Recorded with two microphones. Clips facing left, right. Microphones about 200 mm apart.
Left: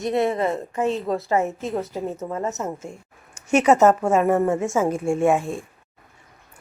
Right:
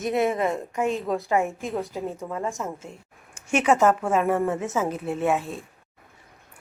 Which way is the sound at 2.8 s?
40° left (ahead or behind).